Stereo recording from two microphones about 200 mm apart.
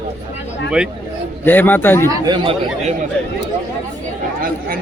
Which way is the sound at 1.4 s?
10° left (ahead or behind).